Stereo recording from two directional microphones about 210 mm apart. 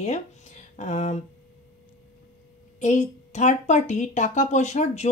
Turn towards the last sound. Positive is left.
turn(degrees=35)  # may be behind; listen again after turning